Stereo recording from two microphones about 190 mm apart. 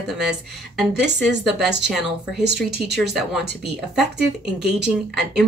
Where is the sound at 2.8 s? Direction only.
Centre (ahead or behind).